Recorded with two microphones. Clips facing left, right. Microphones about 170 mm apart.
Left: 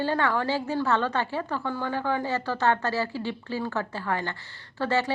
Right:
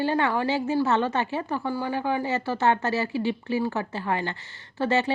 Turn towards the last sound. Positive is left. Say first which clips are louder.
# right 2 dB
turn(degrees=-15)  # may be behind; listen again after turning